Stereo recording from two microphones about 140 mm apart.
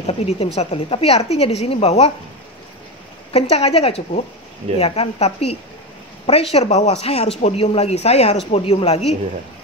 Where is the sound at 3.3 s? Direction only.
45° left (ahead or behind).